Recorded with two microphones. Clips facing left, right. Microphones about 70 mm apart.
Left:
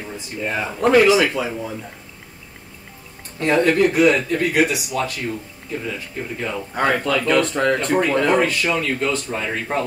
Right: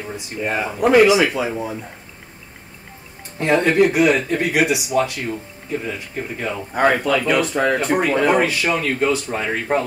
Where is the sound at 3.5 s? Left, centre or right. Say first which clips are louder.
Even; right.